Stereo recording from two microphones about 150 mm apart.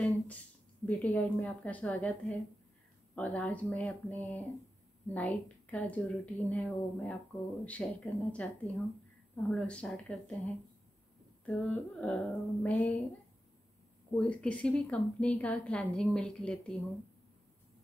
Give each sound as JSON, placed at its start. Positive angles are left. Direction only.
{"t": 0.8, "sound": "a woman's voice", "side_deg": 10}
{"t": 14.1, "sound": "a woman's voice", "side_deg": 5}